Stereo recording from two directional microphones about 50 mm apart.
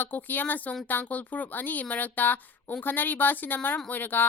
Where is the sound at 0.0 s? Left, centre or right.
Left.